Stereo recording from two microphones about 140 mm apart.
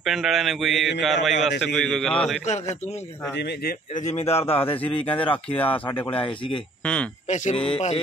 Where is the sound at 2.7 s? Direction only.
55° left (ahead or behind).